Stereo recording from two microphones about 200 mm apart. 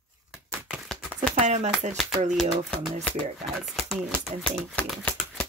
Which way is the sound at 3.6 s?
Centre (ahead or behind).